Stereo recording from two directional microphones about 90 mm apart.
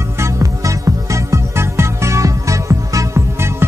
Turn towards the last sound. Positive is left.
turn(degrees=-30)  # may be behind; listen again after turning